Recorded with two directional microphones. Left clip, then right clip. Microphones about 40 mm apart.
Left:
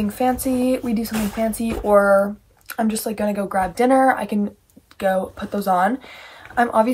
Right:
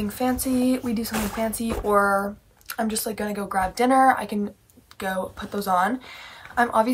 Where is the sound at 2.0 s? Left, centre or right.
Right.